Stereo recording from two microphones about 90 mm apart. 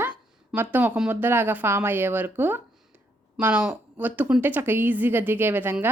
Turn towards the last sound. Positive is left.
turn(degrees=-25)  # may be behind; listen again after turning